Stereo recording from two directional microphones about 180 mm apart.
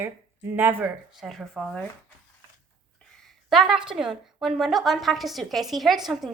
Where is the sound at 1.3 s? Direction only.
Centre (ahead or behind).